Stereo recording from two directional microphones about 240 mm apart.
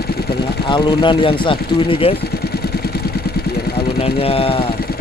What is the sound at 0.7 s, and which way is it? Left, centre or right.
Speech, centre.